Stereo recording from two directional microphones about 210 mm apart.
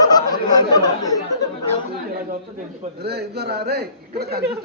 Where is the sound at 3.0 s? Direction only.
50° right (ahead or behind).